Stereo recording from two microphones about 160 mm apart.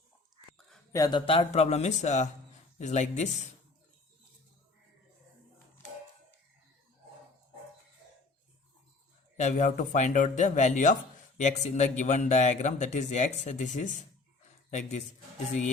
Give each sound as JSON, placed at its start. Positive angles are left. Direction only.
{"t": 0.9, "sound": "speech", "side_deg": 20}
{"t": 1.2, "sound": "a man's voice", "side_deg": 40}
{"t": 9.4, "sound": "a man's voice", "side_deg": 50}